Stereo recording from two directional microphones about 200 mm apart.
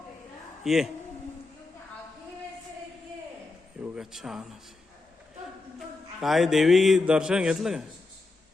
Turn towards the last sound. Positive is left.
turn(degrees=-5)  # may be behind; listen again after turning